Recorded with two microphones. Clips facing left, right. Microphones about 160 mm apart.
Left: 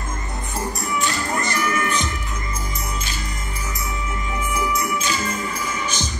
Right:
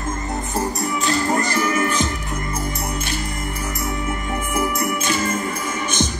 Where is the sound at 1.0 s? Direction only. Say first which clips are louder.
Right 6 dB; 40° right (ahead or behind).